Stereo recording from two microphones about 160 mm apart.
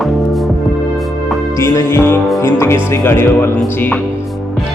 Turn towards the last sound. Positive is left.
turn(degrees=15)  # may be behind; listen again after turning